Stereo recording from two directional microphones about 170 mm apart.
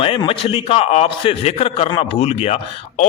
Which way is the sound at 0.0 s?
35° left (ahead or behind).